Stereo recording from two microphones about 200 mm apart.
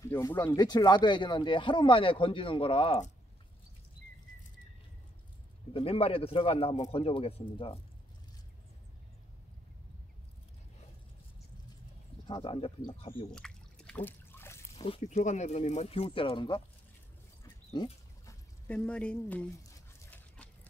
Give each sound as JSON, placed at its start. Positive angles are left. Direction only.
{"t": 0.1, "sound": "speech", "side_deg": 10}
{"t": 0.4, "sound": "speech", "side_deg": 20}
{"t": 5.7, "sound": "speech", "side_deg": 30}
{"t": 12.3, "sound": "speech", "side_deg": 25}
{"t": 13.3, "sound": "liquid", "side_deg": 5}
{"t": 14.8, "sound": "speech", "side_deg": 30}
{"t": 18.2, "sound": "dog", "side_deg": 5}